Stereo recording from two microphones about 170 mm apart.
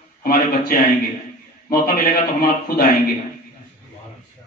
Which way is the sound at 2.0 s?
65° left (ahead or behind).